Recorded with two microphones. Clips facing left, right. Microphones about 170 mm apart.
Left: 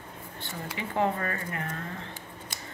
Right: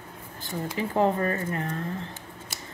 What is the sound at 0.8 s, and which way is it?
Speech, 35° right (ahead or behind).